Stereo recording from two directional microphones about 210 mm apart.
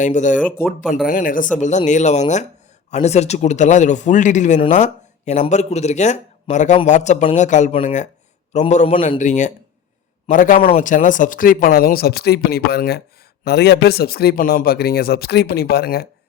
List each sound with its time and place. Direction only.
0.0 s speech: 35° left (ahead or behind)
0.3 s speech: centre (ahead or behind)
1.0 s speech: 40° left (ahead or behind)